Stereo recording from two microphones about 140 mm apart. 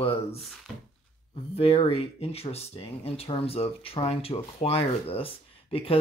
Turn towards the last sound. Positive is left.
turn(degrees=40)  # may be behind; listen again after turning